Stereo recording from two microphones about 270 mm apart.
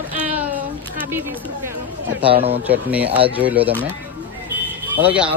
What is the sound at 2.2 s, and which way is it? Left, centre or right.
Speech, right.